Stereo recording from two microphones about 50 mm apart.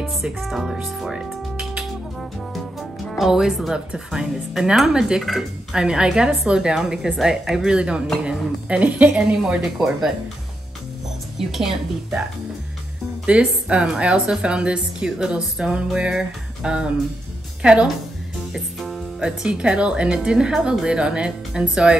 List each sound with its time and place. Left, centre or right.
0.4 s speech: centre
1.1 s music: centre
2.5 s music: centre
3.9 s a woman's voice: centre; by 9.1 s right
9.1 s a woman's voice: centre
11.3 s a woman's voice: centre
13.2 s speech: right
15.0 s a woman's voice: centre
15.6 s speech: right
16.0 s a woman's voice: centre
18.8 s music: centre
19.1 s a woman's voice: centre